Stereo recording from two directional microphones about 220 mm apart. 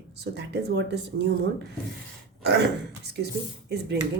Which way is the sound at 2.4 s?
50° right (ahead or behind).